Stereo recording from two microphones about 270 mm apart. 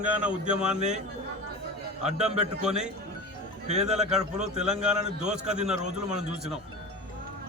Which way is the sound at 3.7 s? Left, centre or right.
Right.